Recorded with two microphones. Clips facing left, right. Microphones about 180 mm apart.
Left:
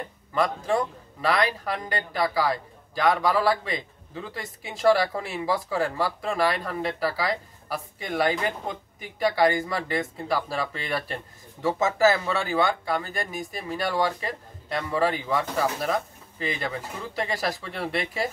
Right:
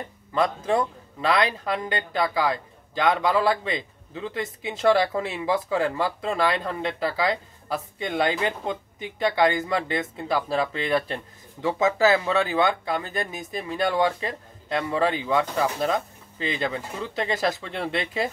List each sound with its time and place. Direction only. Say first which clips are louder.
0.3 s a man's voice: right 1 dB; 20° right (ahead or behind)